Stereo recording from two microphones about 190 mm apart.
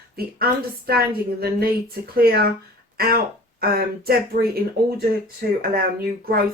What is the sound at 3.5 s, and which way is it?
Speech, 50° right (ahead or behind).